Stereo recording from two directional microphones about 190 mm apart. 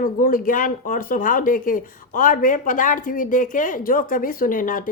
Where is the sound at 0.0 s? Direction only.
45° left (ahead or behind).